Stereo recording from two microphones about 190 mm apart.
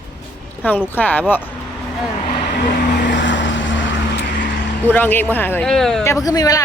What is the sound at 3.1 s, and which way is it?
Vehicle, 70° left (ahead or behind).